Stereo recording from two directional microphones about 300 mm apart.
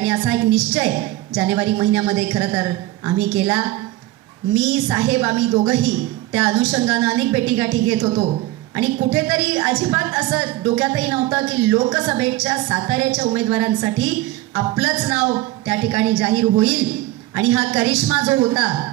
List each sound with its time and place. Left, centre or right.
0.0 s a woman's voice: centre
8.1 s a woman's voice: centre
8.7 s a woman's voice: centre